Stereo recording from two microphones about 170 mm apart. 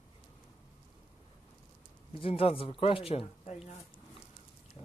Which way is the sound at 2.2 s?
35° left (ahead or behind).